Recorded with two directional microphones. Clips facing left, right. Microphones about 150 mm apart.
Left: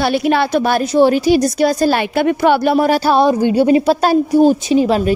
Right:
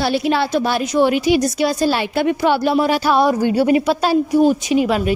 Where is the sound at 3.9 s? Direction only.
40° left (ahead or behind).